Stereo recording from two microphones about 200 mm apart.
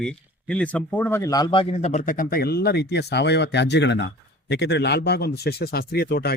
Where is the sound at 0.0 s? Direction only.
5° left (ahead or behind).